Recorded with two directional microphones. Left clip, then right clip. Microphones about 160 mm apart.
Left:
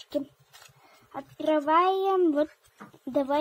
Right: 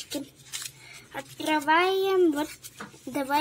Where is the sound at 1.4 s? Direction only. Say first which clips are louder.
Even; 65° left (ahead or behind).